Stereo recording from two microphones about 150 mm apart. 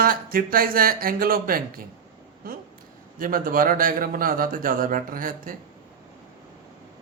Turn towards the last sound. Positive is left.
turn(degrees=-70)  # may be behind; listen again after turning